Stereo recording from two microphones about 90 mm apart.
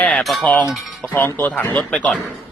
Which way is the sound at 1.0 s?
25° left (ahead or behind).